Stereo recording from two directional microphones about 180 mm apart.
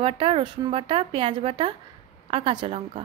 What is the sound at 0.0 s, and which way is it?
Speech, 30° right (ahead or behind).